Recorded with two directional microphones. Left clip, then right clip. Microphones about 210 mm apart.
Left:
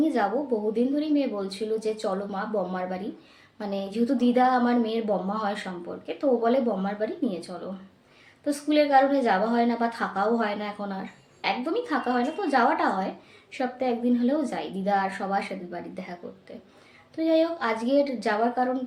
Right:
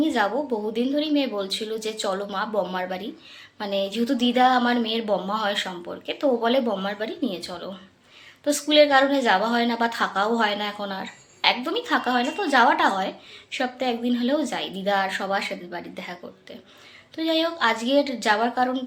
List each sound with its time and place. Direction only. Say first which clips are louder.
0.0 s a woman's voice: right 2 dB; centre (ahead or behind)
17.2 s a woman's voice: even; centre (ahead or behind)